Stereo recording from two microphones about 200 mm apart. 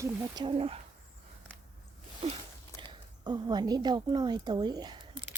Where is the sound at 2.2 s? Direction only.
25° right (ahead or behind).